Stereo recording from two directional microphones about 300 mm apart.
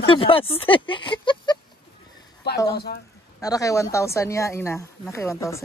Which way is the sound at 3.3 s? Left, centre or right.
Centre.